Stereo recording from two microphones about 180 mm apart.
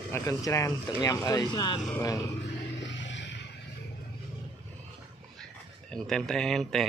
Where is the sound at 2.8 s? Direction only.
85° left.